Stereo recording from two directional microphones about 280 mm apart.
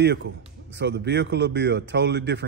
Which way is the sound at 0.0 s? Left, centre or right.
Right.